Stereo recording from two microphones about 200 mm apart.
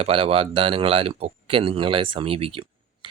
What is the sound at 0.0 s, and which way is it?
Speech, 30° right (ahead or behind).